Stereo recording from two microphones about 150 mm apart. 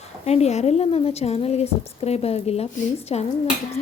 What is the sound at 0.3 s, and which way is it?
A woman's voice, 45° left (ahead or behind).